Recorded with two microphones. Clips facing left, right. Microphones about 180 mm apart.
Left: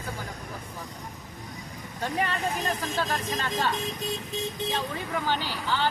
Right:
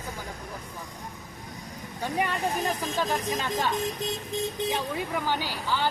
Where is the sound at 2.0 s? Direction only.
15° right (ahead or behind).